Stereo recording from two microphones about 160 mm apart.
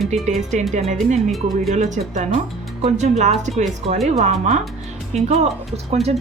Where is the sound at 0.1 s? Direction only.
45° right (ahead or behind).